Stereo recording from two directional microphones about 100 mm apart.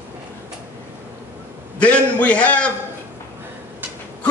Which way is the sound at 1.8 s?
15° left (ahead or behind).